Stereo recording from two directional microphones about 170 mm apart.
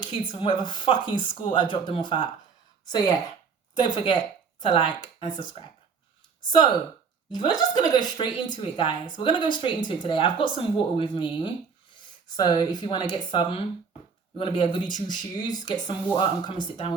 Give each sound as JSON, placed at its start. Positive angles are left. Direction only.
{"t": 0.0, "sound": "speech", "side_deg": 25}
{"t": 3.8, "sound": "speech", "side_deg": 25}
{"t": 7.3, "sound": "speech", "side_deg": 25}